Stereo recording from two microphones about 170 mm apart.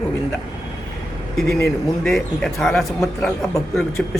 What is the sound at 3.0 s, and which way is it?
Speech, 20° left (ahead or behind).